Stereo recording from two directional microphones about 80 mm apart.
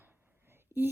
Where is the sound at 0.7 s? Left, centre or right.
Right.